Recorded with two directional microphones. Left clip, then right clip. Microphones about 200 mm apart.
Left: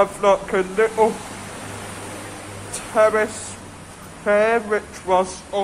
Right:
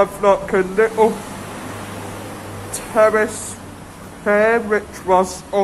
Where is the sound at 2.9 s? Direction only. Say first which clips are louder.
Right 3 dB; 5° left (ahead or behind).